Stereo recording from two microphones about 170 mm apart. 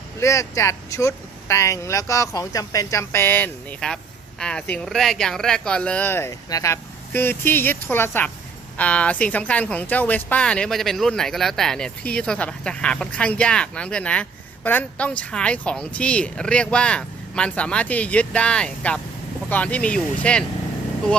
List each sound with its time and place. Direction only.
0.2 s speech: 20° left (ahead or behind)